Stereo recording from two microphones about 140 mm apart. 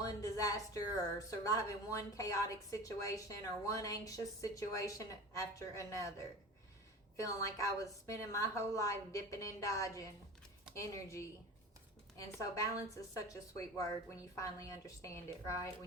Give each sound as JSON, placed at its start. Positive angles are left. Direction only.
{"t": 0.0, "sound": "a woman's voice", "side_deg": 25}
{"t": 7.3, "sound": "a woman's voice", "side_deg": 25}